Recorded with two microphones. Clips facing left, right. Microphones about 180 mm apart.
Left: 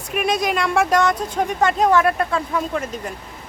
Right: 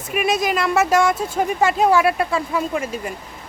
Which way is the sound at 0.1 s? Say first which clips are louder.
Right 1 dB; 5° right (ahead or behind).